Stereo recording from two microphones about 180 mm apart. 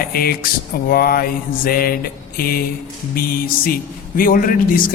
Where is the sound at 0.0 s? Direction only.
55° left (ahead or behind).